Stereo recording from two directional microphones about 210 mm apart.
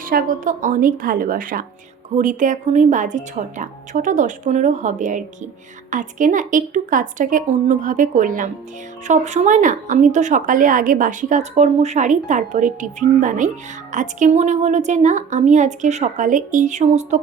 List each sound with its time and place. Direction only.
0.0 s speech: 45° right (ahead or behind)